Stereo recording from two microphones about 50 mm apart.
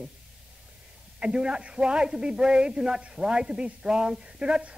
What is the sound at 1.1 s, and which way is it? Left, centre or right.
A woman's voice, centre.